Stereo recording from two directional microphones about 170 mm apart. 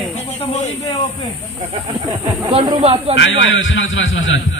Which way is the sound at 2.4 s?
25° right (ahead or behind).